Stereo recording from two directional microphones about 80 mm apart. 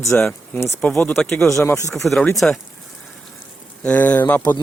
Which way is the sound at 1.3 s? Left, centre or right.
Left.